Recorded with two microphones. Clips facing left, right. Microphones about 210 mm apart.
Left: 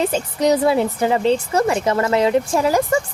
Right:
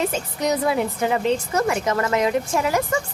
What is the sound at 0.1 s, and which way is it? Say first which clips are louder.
A woman's voice: left 6 dB; 30° left (ahead or behind).